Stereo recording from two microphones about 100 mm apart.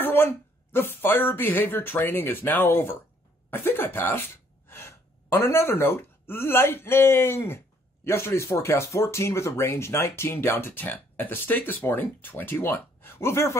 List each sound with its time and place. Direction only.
0.0 s speech: 20° left (ahead or behind)